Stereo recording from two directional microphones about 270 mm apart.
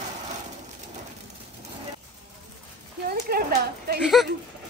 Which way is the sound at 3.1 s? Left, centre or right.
Right.